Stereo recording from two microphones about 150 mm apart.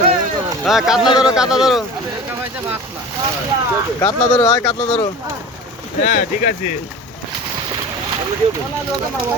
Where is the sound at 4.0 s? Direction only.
25° left (ahead or behind).